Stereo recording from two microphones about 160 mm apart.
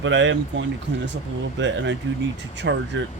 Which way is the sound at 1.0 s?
90° right.